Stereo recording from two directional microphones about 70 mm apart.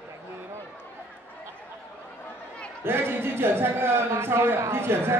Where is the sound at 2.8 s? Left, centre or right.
Right.